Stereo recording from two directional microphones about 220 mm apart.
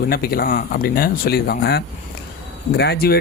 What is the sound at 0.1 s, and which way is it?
Speech, 45° left (ahead or behind).